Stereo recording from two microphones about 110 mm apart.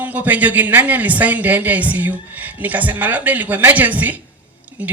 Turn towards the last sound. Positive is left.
turn(degrees=-15)  # may be behind; listen again after turning